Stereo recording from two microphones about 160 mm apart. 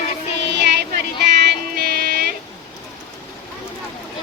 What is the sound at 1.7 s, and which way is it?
Music, 80° right.